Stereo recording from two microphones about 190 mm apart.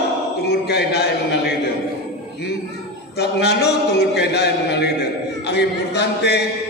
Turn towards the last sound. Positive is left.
turn(degrees=60)  # may be behind; listen again after turning